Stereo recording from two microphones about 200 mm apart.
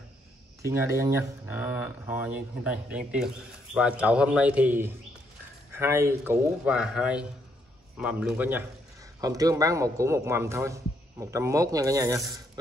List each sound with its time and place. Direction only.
0.6 s a man's voice: 15° right (ahead or behind)